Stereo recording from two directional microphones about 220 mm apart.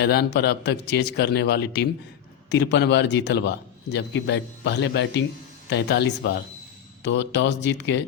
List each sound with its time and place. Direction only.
0.0 s a man's voice: 50° left (ahead or behind)